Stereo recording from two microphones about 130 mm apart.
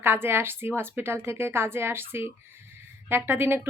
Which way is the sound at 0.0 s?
15° right (ahead or behind).